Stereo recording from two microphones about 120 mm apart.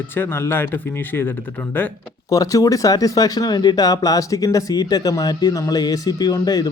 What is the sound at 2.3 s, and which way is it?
Speech, 30° left (ahead or behind).